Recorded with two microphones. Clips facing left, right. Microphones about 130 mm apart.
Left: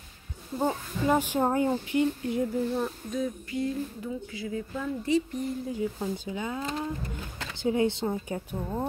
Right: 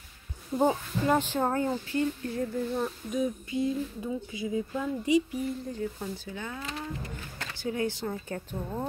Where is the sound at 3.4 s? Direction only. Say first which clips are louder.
Right 1 dB; 20° right (ahead or behind).